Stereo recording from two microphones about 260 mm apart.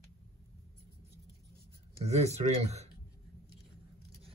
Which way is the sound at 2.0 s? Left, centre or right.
Right.